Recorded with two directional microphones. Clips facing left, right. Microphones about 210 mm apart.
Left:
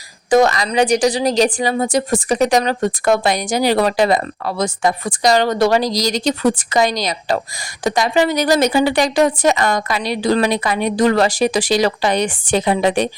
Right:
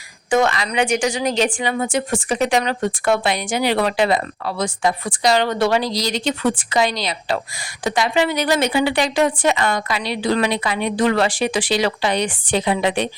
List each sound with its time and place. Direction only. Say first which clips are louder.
0.3 s a woman's voice: left 4 dB; 40° left (ahead or behind)